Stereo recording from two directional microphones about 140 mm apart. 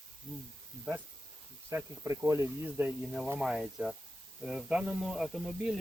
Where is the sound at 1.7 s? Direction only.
20° right (ahead or behind).